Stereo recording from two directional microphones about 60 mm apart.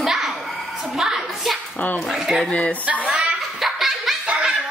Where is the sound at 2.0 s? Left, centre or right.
Centre.